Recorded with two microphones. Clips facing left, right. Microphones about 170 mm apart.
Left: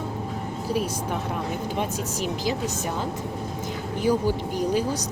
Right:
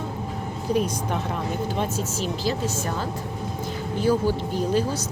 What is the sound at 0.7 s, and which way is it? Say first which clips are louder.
A woman's voice: right 3 dB; 5° left (ahead or behind).